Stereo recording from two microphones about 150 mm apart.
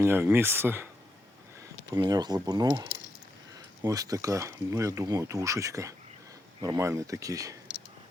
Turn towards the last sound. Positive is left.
turn(degrees=-20)  # may be behind; listen again after turning